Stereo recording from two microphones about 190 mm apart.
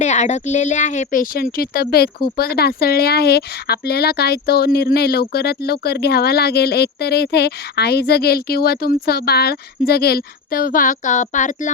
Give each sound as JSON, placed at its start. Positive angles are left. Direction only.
{"t": 0.0, "sound": "speech", "side_deg": 35}